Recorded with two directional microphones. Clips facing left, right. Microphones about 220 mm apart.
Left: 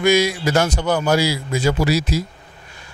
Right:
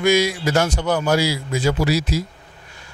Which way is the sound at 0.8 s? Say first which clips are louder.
Left 1 dB; 30° left (ahead or behind).